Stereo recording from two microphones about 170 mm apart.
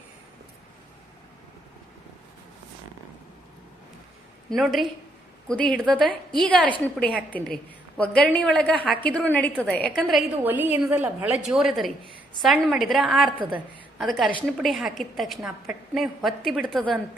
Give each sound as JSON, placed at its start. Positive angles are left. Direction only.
{"t": 4.4, "sound": "a woman's voice", "side_deg": 0}
{"t": 10.4, "sound": "a woman's voice", "side_deg": -10}